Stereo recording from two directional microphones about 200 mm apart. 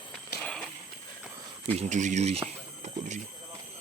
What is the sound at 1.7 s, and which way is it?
Speech, 35° right (ahead or behind).